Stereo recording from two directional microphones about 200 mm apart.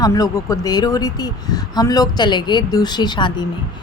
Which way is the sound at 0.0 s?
15° left (ahead or behind).